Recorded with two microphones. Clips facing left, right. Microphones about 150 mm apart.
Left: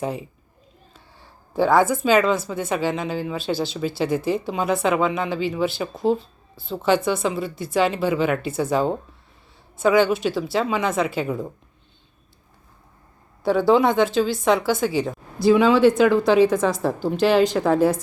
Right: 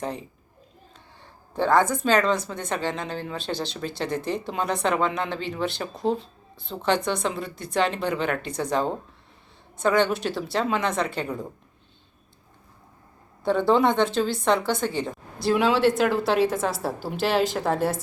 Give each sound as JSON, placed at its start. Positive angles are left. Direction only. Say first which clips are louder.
{"t": 0.0, "sound": "a woman's voice", "louder": "left 4 dB", "side_deg": 10}
{"t": 13.4, "sound": "a woman's voice", "louder": "left 3 dB", "side_deg": 5}